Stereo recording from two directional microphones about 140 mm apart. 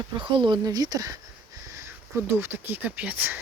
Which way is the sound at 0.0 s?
35° right (ahead or behind).